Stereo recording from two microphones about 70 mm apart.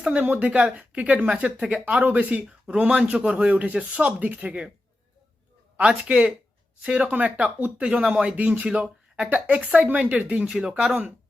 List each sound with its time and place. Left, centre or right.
0.2 s speech: right
5.7 s speech: centre